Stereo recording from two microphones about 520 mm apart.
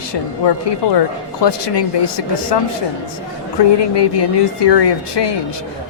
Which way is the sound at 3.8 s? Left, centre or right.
Left.